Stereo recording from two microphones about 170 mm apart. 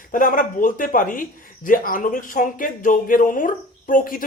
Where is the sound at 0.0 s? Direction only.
55° left (ahead or behind).